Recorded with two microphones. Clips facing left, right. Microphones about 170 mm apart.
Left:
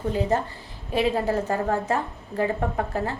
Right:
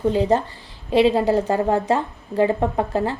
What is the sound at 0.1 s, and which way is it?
Speech, 20° right (ahead or behind).